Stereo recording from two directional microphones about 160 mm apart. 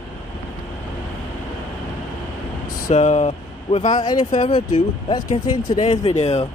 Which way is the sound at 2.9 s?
45° left (ahead or behind).